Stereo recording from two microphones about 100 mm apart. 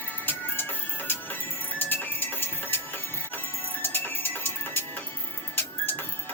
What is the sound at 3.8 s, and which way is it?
Music, 20° left (ahead or behind).